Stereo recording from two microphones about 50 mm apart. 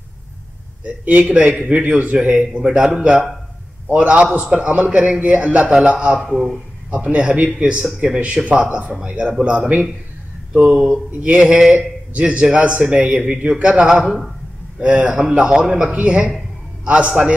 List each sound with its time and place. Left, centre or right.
0.8 s a man's voice: right
1.2 s a man's voice: right
2.1 s a man's voice: centre
6.3 s a man's voice: centre
6.9 s a man's voice: right
7.3 s a man's voice: right
10.5 s a man's voice: right
13.1 s a man's voice: centre
13.8 s a man's voice: centre
14.8 s a man's voice: right